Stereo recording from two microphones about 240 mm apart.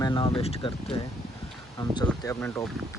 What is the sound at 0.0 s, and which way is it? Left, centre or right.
Speech, centre.